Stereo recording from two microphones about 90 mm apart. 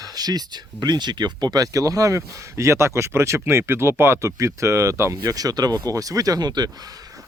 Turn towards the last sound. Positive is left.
turn(degrees=-50)  # may be behind; listen again after turning